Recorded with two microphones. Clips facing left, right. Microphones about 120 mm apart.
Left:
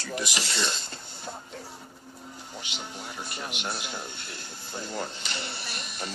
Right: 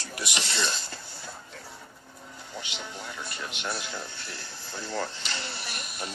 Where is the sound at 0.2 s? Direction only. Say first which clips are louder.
Even; centre (ahead or behind).